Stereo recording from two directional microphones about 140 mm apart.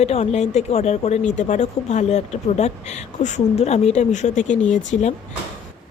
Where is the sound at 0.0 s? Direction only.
50° left (ahead or behind).